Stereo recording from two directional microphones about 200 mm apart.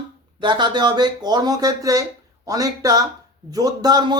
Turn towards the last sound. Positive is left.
turn(degrees=-20)  # may be behind; listen again after turning